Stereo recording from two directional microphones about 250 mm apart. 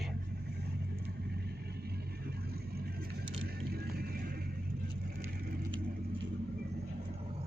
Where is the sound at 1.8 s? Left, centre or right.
Right.